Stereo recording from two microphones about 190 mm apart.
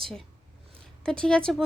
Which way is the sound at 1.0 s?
5° left (ahead or behind).